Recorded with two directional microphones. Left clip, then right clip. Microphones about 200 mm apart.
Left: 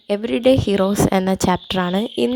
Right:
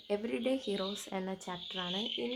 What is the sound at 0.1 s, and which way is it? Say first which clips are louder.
Speech: left 18 dB; 40° left (ahead or behind).